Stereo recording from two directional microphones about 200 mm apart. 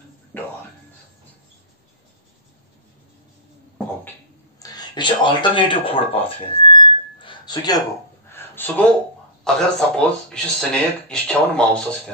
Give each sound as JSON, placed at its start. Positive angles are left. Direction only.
{"t": 0.3, "sound": "music", "side_deg": 10}
{"t": 4.6, "sound": "a sound", "side_deg": 20}
{"t": 9.4, "sound": "speech", "side_deg": 5}